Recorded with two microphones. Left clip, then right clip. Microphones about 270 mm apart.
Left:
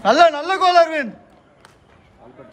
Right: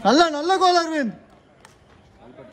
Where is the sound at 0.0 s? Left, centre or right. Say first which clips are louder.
Left 4 dB; centre.